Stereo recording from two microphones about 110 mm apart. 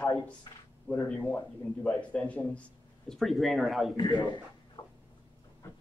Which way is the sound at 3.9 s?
40° left (ahead or behind).